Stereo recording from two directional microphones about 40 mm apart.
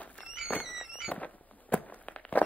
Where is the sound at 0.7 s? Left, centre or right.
Centre.